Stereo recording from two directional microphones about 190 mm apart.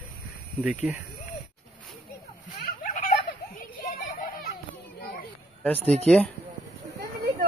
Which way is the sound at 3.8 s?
50° left (ahead or behind).